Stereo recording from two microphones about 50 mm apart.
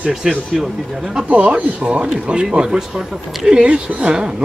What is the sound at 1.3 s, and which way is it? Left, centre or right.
Speech, right.